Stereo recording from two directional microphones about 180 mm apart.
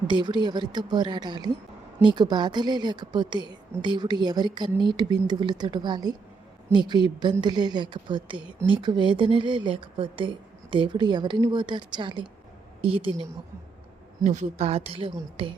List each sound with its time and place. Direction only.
0.1 s a woman's voice: 25° right (ahead or behind)
14.3 s a woman's voice: 40° right (ahead or behind)